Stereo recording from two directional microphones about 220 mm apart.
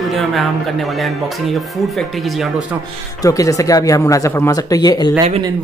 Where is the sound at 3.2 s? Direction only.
15° left (ahead or behind).